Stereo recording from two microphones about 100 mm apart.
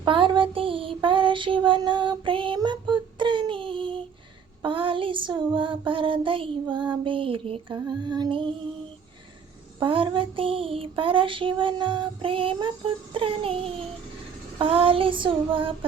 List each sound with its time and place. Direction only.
0.0 s music: 55° right (ahead or behind)
2.6 s child singing: 50° right (ahead or behind); by 7.6 s 70° right (ahead or behind)
7.7 s lullaby: 45° right (ahead or behind)
9.8 s child singing: 60° right (ahead or behind)